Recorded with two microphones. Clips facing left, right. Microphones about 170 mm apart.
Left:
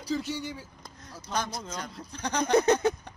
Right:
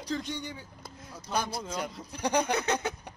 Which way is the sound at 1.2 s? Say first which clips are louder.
Right 1 dB; 10° right (ahead or behind).